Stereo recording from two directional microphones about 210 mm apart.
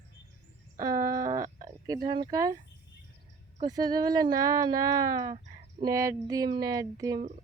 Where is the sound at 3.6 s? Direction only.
20° right (ahead or behind).